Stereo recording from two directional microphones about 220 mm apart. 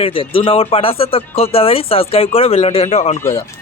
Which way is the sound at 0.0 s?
25° left (ahead or behind).